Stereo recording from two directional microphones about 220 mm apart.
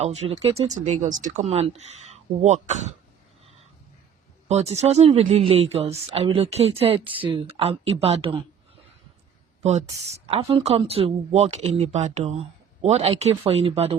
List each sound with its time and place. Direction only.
0.0 s speech: 30° right (ahead or behind)
4.4 s speech: 30° right (ahead or behind)
9.6 s speech: 30° right (ahead or behind)